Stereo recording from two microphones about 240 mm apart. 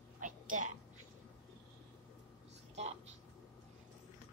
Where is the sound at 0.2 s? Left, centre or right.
Right.